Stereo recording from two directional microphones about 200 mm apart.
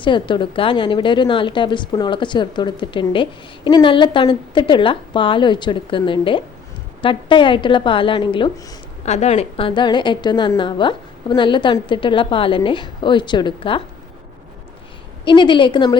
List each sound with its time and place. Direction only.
0.0 s a woman's voice: 25° left (ahead or behind)
15.2 s a woman's voice: 25° left (ahead or behind)